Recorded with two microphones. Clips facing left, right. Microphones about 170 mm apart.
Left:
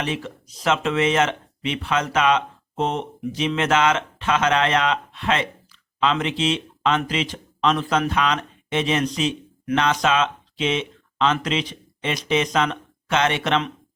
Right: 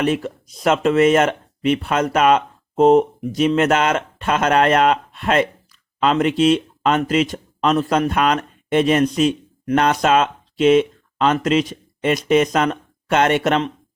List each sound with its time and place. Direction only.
0.0 s speech: 50° right (ahead or behind)